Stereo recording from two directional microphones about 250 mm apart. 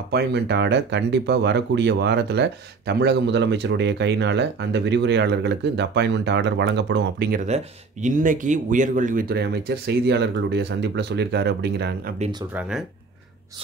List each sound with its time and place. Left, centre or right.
0.1 s speech: right
12.2 s speech: centre
12.5 s speech: centre